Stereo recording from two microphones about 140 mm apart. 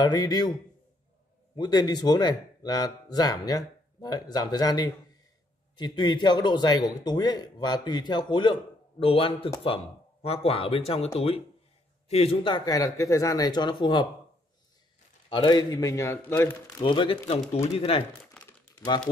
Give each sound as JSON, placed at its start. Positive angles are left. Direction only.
{"t": 0.0, "sound": "speech", "side_deg": 30}
{"t": 1.6, "sound": "a man's voice", "side_deg": 30}
{"t": 12.5, "sound": "speech", "side_deg": 25}
{"t": 15.2, "sound": "speech", "side_deg": 35}
{"t": 16.8, "sound": "a man's voice", "side_deg": 35}
{"t": 18.4, "sound": "crumpling", "side_deg": 5}